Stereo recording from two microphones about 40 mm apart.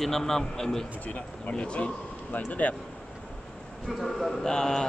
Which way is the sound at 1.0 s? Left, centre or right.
Left.